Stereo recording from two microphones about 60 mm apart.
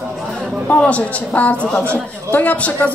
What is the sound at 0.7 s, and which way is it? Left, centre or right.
Speech, left.